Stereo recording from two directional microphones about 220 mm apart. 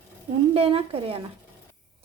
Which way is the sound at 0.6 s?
25° right (ahead or behind).